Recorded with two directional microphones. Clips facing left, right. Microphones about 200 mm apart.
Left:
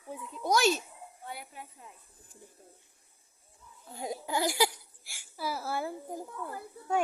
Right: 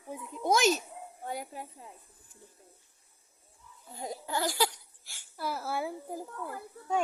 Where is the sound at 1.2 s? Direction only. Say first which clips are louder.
Right 6 dB; 40° right (ahead or behind).